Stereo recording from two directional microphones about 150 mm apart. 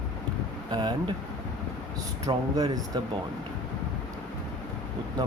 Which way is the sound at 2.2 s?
25° right (ahead or behind).